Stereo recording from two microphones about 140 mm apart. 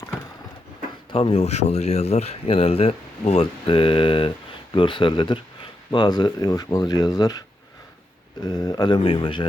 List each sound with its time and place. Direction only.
1.1 s speech: 45° left (ahead or behind)